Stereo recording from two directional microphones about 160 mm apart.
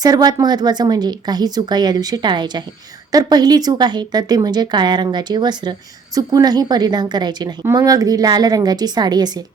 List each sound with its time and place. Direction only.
0.0 s a woman's voice: 25° right (ahead or behind)